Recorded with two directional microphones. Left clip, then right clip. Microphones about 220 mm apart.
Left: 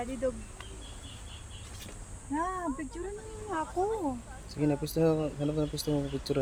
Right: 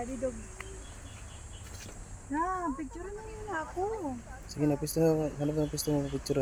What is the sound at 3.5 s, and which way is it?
Speech, 30° left (ahead or behind).